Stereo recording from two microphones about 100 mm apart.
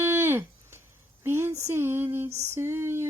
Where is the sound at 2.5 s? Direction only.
25° right (ahead or behind).